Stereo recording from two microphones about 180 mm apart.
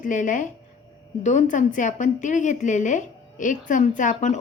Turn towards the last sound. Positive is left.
turn(degrees=40)  # may be behind; listen again after turning